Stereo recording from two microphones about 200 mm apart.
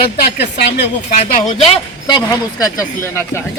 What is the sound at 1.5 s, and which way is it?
Speech, 25° left (ahead or behind).